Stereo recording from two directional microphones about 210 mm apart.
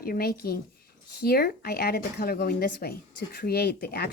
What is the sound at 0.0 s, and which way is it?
Speech, 45° left (ahead or behind).